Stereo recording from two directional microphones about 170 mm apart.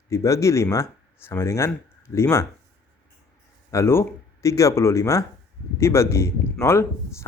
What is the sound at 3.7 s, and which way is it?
Speech, 15° left (ahead or behind).